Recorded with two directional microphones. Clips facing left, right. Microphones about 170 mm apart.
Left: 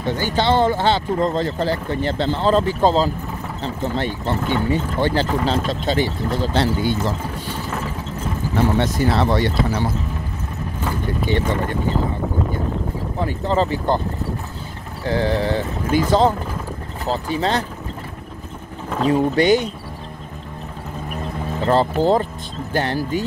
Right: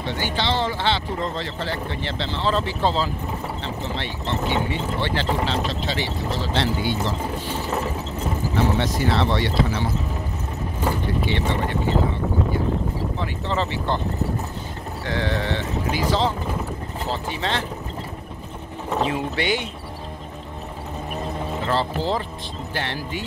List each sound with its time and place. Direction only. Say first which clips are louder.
0.0 s speech: left 5 dB; 45° left (ahead or behind)
8.7 s speech: left 3 dB; 45° left (ahead or behind)
11.2 s speech: left 6 dB; 45° left (ahead or behind)
13.2 s speech: left 8 dB; 40° left (ahead or behind)
15.0 s speech: left 6 dB; 35° left (ahead or behind)
19.0 s speech: left 9 dB; 40° left (ahead or behind)
21.6 s speech: left 8 dB; 45° left (ahead or behind)